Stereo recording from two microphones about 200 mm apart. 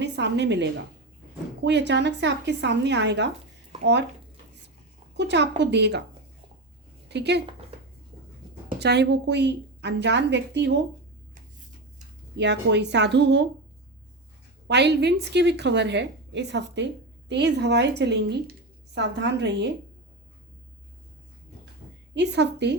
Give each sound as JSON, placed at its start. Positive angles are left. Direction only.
{"t": 0.0, "sound": "a woman's voice", "side_deg": -60}
{"t": 5.1, "sound": "a woman's voice", "side_deg": -60}
{"t": 7.1, "sound": "a woman's voice", "side_deg": -55}
{"t": 8.8, "sound": "a woman's voice", "side_deg": -55}
{"t": 12.4, "sound": "a woman's voice", "side_deg": -60}
{"t": 14.7, "sound": "a woman's voice", "side_deg": -60}
{"t": 22.1, "sound": "a woman's voice", "side_deg": -60}